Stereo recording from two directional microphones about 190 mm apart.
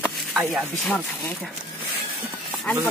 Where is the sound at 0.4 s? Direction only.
5° right (ahead or behind).